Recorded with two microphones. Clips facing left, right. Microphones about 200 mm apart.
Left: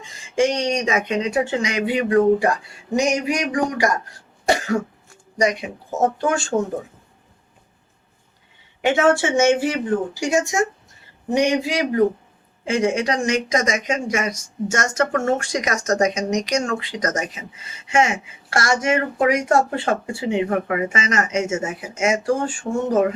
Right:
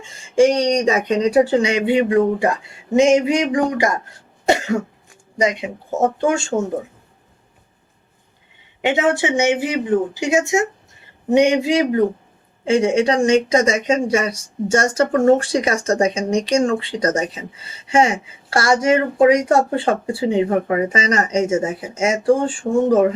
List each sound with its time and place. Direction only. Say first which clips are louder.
0.0 s speech: right 6 dB; 30° right (ahead or behind)
4.4 s cough: right 2 dB; 25° right (ahead or behind)
6.1 s speech: right 3 dB; 20° right (ahead or behind)
8.8 s speech: even; 20° right (ahead or behind)